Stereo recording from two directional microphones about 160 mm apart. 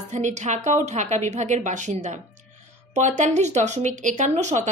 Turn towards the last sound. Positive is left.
turn(degrees=-50)  # may be behind; listen again after turning